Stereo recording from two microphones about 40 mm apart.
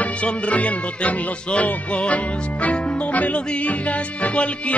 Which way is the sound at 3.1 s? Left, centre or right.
Left.